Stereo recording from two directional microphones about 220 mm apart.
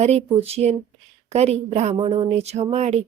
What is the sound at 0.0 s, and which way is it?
A woman's voice, 30° right (ahead or behind).